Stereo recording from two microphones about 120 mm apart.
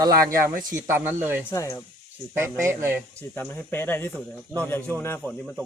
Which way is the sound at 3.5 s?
20° left (ahead or behind).